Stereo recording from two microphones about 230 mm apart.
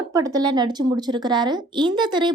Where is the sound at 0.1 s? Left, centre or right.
Centre.